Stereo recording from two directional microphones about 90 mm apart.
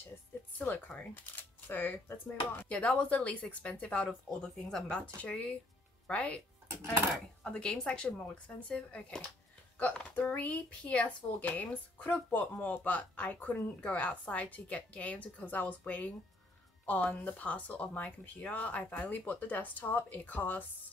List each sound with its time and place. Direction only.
0.6 s speech: 15° left (ahead or behind)
7.4 s speech: 10° left (ahead or behind)